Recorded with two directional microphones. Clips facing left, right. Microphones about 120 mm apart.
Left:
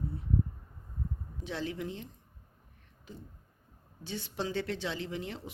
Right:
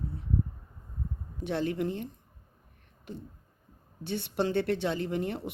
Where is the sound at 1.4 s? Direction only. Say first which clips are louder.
Right 7 dB; 55° right (ahead or behind).